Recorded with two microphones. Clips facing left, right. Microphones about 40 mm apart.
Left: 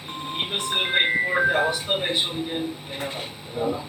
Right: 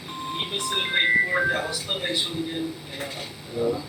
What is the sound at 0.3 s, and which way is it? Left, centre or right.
Speech, left.